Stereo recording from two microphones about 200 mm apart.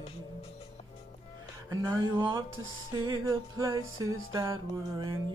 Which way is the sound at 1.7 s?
20° right (ahead or behind).